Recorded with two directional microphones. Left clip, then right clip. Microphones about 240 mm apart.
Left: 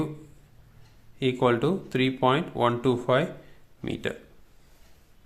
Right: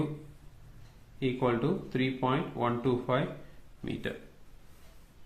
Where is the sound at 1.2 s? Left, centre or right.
Left.